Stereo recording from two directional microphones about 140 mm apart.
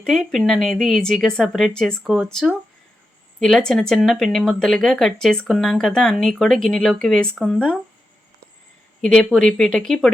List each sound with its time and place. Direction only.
0.0 s speech: 5° left (ahead or behind)
9.0 s speech: 5° left (ahead or behind)